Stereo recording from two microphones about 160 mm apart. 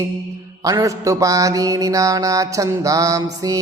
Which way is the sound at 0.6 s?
20° right (ahead or behind).